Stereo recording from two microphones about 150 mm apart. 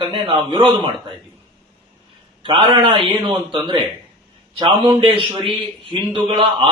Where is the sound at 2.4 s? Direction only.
35° right (ahead or behind).